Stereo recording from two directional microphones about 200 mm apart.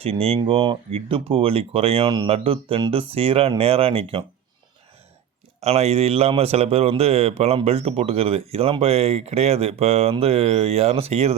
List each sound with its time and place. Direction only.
0.0 s speech: 30° right (ahead or behind)
5.5 s speech: 30° right (ahead or behind)